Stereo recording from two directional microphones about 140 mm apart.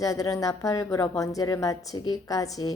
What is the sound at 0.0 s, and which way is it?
A woman's voice, 25° left (ahead or behind).